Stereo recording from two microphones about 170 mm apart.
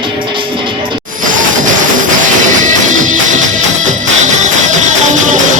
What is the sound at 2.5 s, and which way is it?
Music, 50° right (ahead or behind).